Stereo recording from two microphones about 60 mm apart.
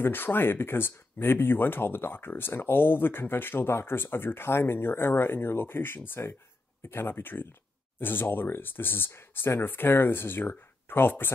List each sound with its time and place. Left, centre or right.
0.0 s speech: left